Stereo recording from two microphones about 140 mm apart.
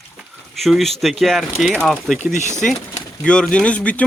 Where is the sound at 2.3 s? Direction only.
60° left (ahead or behind).